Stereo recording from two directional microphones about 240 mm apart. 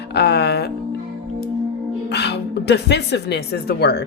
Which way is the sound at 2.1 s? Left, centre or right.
Left.